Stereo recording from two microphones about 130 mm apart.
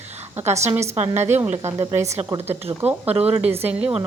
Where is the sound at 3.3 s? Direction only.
15° right (ahead or behind).